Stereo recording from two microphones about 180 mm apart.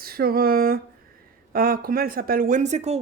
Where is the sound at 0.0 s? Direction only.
55° right (ahead or behind).